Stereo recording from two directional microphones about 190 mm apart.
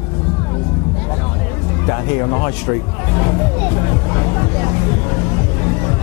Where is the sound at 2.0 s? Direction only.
15° left (ahead or behind).